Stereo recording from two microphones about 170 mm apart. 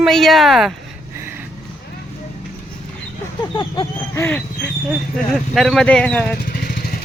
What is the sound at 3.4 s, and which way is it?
Vehicle, 30° left (ahead or behind).